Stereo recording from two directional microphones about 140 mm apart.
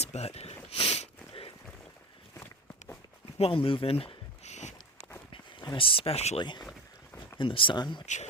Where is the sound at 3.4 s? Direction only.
40° left (ahead or behind).